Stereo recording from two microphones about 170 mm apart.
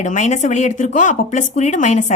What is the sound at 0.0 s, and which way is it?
A woman's voice, 45° left (ahead or behind).